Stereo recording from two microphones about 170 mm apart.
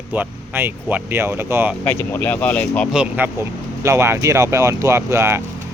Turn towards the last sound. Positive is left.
turn(degrees=-15)  # may be behind; listen again after turning